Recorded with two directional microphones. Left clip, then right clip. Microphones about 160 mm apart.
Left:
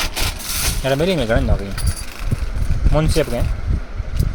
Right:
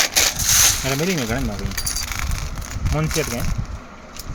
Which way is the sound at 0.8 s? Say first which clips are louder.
Left 5 dB; 35° left (ahead or behind).